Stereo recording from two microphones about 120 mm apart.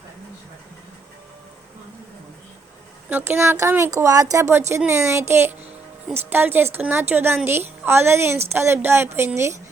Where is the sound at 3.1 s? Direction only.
15° right (ahead or behind).